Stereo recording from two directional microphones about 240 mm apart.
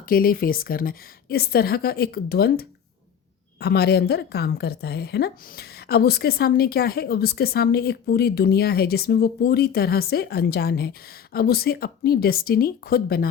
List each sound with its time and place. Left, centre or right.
0.1 s a woman's voice: left